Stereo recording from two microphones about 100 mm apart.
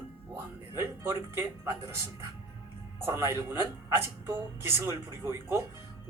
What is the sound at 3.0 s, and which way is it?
A woman's voice, 25° right (ahead or behind).